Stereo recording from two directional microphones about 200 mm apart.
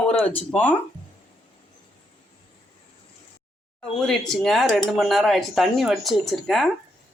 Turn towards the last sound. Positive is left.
turn(degrees=0)  # may be behind; listen again after turning